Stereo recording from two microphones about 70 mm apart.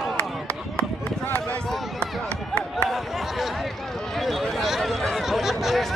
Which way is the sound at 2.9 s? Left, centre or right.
Centre.